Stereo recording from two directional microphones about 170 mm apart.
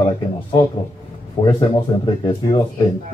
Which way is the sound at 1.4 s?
30° left (ahead or behind).